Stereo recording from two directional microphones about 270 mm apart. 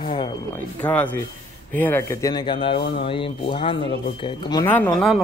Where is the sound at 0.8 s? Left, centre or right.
Centre.